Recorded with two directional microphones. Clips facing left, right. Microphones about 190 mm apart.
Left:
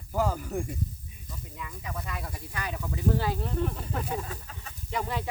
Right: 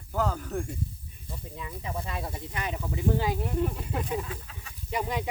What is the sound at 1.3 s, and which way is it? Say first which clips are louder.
Speech: right 3 dB; 30° right (ahead or behind).